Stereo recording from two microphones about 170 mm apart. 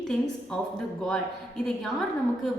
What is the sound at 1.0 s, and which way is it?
A woman's voice, 5° left (ahead or behind).